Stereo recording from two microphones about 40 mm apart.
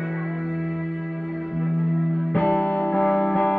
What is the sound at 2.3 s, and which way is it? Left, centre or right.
Music, left.